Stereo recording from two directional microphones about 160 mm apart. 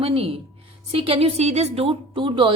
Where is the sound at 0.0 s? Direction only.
35° right (ahead or behind).